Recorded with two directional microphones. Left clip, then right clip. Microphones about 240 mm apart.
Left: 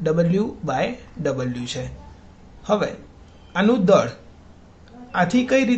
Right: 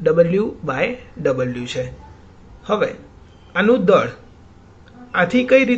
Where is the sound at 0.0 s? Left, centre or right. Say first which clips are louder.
Right 6 dB; centre.